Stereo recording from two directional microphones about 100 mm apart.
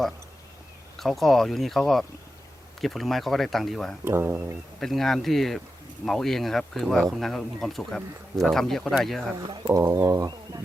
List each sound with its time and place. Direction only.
0.9 s speech: centre (ahead or behind)
4.0 s speech: 25° right (ahead or behind)
4.8 s speech: 5° left (ahead or behind)
9.6 s speech: 30° right (ahead or behind)